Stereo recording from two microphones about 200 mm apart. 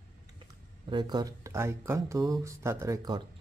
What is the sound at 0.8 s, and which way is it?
Speech, 20° right (ahead or behind).